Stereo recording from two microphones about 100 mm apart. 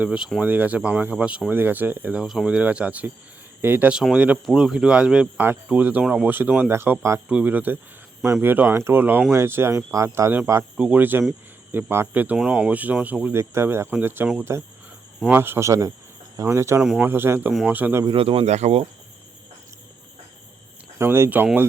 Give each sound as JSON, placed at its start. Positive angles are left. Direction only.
{"t": 0.0, "sound": "speech", "side_deg": -10}
{"t": 2.2, "sound": "speech", "side_deg": 0}
{"t": 10.8, "sound": "speech", "side_deg": -15}
{"t": 13.4, "sound": "speech", "side_deg": -25}
{"t": 18.0, "sound": "speech", "side_deg": -60}
{"t": 21.0, "sound": "speech", "side_deg": -25}